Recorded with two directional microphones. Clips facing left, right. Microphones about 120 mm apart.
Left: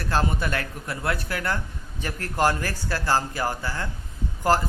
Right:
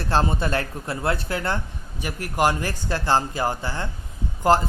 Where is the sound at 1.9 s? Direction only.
15° right (ahead or behind).